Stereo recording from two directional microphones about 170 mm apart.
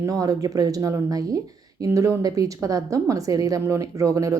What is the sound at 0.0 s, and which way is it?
A woman's voice, 20° right (ahead or behind).